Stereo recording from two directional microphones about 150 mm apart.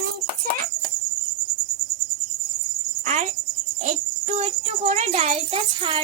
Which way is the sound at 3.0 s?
50° right (ahead or behind).